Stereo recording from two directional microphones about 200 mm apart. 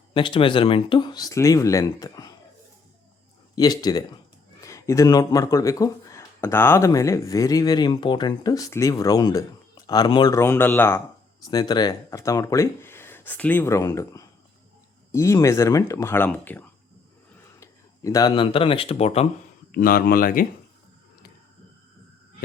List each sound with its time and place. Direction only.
0.1 s speech: 25° left (ahead or behind)
3.5 s speech: 20° left (ahead or behind)
19.7 s speech: 45° left (ahead or behind)